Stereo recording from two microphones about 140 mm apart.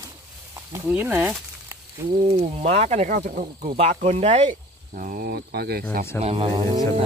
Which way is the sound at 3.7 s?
50° right (ahead or behind).